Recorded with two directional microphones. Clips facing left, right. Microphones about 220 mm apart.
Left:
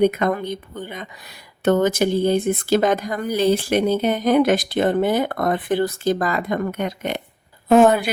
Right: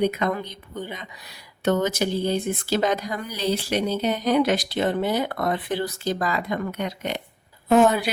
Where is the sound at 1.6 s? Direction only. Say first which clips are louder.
Left 5 dB; 50° left (ahead or behind).